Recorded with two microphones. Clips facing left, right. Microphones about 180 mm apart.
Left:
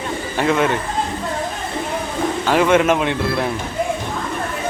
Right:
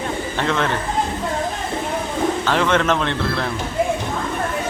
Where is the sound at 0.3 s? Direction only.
10° left (ahead or behind).